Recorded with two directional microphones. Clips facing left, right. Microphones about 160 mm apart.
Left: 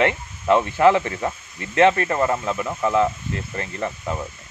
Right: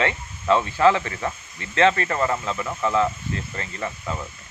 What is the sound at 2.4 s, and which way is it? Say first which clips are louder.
Speech: left 2 dB; 10° left (ahead or behind).